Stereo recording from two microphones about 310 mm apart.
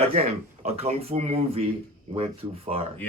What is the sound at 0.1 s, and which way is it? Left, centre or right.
Speech, centre.